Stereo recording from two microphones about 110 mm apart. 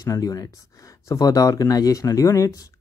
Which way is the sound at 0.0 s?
30° left (ahead or behind).